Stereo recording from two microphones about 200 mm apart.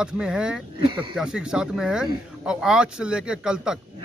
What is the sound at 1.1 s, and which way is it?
Speech, 5° right (ahead or behind).